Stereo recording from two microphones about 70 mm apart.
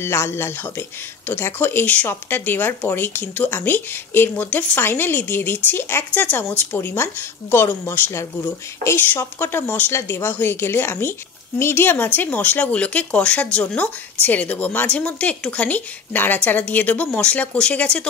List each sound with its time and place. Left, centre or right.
0.0 s speech: left
6.2 s speech: left
8.2 s speech: left
8.9 s a woman's voice: left